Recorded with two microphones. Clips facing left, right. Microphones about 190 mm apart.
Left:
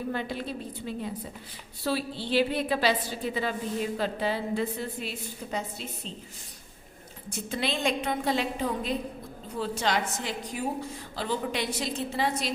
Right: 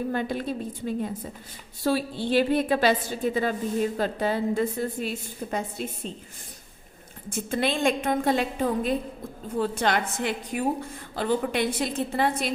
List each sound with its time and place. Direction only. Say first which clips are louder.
0.1 s a woman's voice: right 4 dB; 50° right (ahead or behind)
7.3 s a woman's voice: right 5 dB; 50° right (ahead or behind)